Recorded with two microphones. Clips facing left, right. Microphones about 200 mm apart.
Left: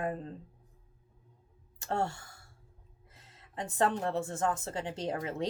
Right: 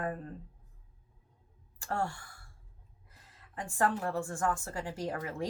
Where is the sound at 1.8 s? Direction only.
25° left (ahead or behind).